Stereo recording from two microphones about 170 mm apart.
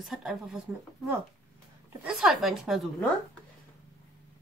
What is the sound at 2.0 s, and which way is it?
Speech, 5° right (ahead or behind).